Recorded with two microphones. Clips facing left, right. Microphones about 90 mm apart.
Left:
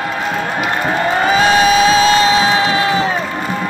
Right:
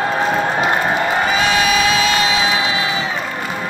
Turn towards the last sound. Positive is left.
turn(degrees=45)  # may be behind; listen again after turning